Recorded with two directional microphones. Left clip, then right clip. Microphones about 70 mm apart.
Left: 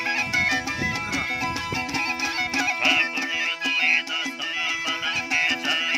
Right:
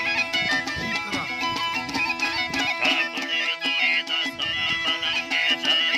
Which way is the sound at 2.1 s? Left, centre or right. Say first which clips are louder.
Even; left.